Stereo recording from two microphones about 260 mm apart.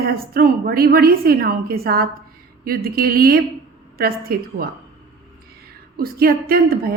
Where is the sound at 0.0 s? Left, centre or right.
Right.